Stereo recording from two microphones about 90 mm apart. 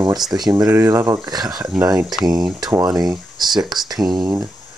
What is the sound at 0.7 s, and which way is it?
Speech, 30° right (ahead or behind).